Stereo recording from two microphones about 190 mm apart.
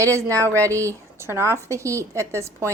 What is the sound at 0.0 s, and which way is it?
A woman's voice, 15° right (ahead or behind).